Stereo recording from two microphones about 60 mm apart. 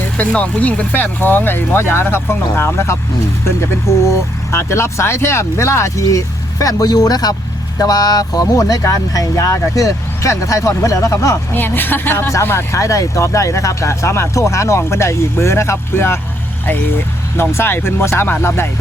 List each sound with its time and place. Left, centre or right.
0.2 s speech: left
8.8 s speech: left
11.5 s speech: left
12.3 s speech: left
12.8 s speech: left
17.3 s speech: left